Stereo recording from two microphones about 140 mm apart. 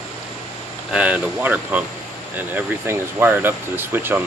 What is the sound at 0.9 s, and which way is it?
Speech, 10° right (ahead or behind).